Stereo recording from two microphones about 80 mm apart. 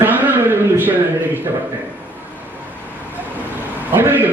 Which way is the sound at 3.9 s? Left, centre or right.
Right.